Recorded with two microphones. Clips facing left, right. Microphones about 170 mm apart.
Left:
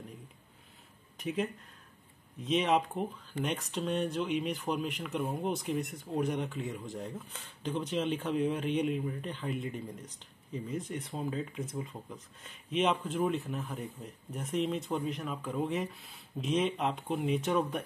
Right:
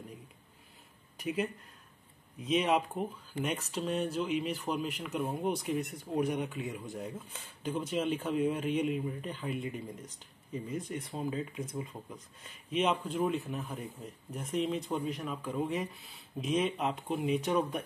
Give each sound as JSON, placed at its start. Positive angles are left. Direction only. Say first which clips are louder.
{"t": 1.1, "sound": "speech", "louder": "even", "side_deg": -5}